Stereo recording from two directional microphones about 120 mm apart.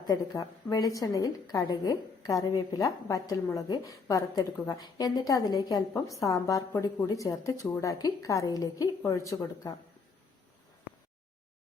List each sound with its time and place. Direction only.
0.1 s a woman's voice: 30° left (ahead or behind)